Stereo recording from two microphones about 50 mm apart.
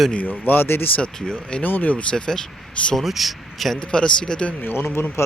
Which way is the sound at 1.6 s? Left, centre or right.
Left.